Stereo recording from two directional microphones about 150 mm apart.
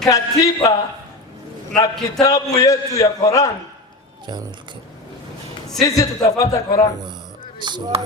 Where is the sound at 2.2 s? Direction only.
20° left (ahead or behind).